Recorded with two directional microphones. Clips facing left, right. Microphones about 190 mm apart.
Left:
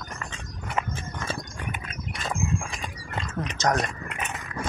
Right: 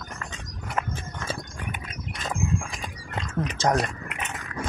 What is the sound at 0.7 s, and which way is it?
Horse, centre (ahead or behind).